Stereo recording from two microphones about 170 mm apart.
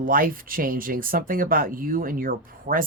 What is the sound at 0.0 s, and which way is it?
Speech, 55° right (ahead or behind).